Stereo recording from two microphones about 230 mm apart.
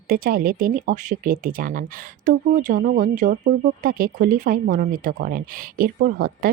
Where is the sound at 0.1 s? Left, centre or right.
Right.